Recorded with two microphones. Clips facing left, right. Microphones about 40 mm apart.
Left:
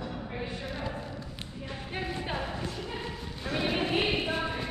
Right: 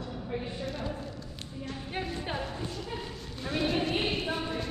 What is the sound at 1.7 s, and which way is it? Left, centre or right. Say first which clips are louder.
Music: even; centre.